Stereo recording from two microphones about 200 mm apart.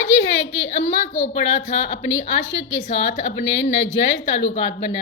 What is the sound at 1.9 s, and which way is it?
A woman's voice, 65° left (ahead or behind).